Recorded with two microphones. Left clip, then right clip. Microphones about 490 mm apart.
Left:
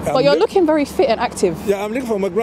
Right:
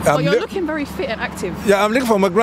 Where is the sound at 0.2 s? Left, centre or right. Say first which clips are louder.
Left 5 dB; left.